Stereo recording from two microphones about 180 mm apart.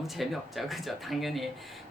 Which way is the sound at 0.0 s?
Centre (ahead or behind).